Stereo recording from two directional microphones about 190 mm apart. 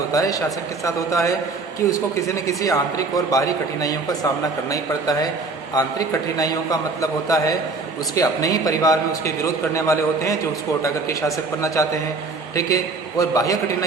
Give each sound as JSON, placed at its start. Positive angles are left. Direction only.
{"t": 0.1, "sound": "a man's voice", "side_deg": 20}